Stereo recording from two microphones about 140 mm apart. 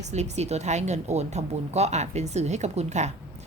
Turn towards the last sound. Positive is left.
turn(degrees=-55)  # may be behind; listen again after turning